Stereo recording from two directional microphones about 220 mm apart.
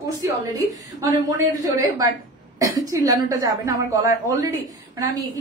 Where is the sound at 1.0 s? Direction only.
15° right (ahead or behind).